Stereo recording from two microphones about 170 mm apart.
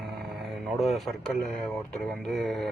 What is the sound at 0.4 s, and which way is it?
Speech, centre (ahead or behind).